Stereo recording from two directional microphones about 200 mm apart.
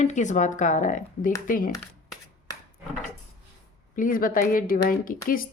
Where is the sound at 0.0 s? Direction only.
35° left (ahead or behind).